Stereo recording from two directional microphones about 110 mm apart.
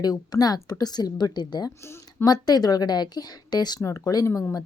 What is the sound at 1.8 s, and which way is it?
Speech, 25° left (ahead or behind).